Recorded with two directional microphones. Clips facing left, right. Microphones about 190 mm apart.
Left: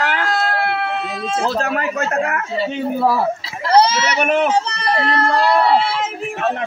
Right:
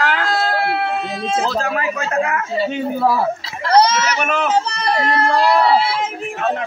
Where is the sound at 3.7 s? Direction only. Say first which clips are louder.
Even; 30° left (ahead or behind).